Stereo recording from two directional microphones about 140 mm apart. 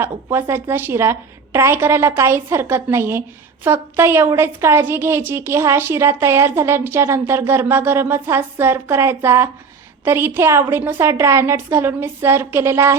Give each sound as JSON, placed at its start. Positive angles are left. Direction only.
{"t": 0.0, "sound": "a woman's voice", "side_deg": -15}